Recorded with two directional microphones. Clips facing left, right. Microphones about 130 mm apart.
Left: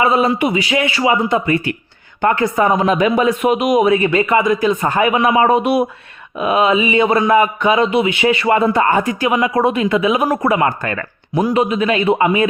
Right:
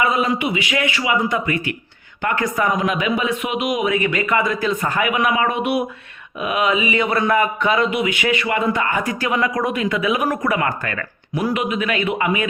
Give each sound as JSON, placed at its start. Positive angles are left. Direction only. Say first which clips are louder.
{"t": 0.0, "sound": "a man's voice", "louder": "left 5 dB", "side_deg": 30}
{"t": 9.2, "sound": "a man's voice", "louder": "left 5 dB", "side_deg": 20}